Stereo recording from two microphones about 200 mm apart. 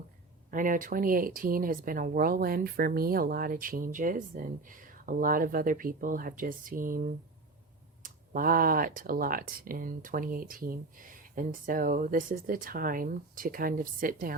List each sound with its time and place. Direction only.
0.5 s speech: 40° right (ahead or behind)
8.0 s speech: 45° right (ahead or behind)